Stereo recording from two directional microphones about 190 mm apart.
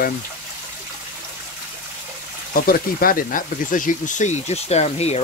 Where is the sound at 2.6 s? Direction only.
50° left (ahead or behind).